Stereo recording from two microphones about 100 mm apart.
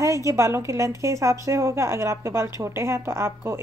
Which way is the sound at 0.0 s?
30° right (ahead or behind).